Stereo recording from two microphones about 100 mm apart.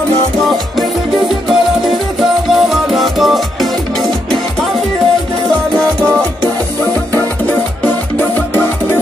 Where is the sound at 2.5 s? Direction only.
5° right (ahead or behind).